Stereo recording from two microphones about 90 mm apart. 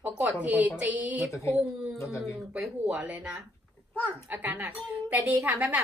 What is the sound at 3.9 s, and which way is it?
Speech, 20° left (ahead or behind).